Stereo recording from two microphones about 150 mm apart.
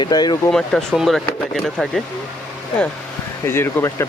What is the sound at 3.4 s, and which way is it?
Speech, 15° left (ahead or behind).